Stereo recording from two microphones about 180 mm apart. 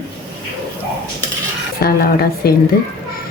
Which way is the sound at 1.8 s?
55° left (ahead or behind).